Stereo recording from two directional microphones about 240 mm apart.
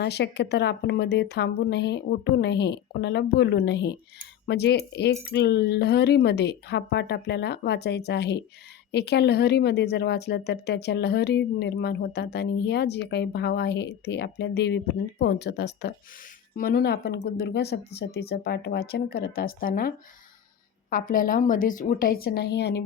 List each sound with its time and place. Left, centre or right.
0.0 s speech: left
20.9 s speech: left